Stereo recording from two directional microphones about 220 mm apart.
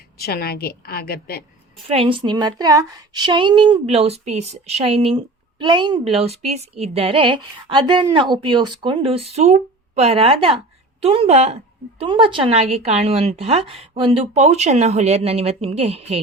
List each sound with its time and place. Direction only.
0.2 s a woman's voice: 45° left (ahead or behind)
1.9 s a woman's voice: 25° right (ahead or behind)